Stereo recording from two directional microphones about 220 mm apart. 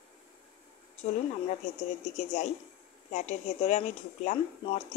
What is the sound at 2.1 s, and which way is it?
A woman's voice, 35° left (ahead or behind).